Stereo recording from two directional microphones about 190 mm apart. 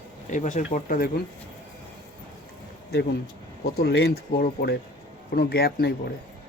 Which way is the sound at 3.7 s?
60° left (ahead or behind).